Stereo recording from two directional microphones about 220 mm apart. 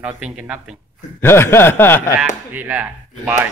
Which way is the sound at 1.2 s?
10° left (ahead or behind).